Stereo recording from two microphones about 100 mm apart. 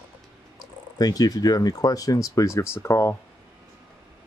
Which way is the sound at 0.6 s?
40° left (ahead or behind).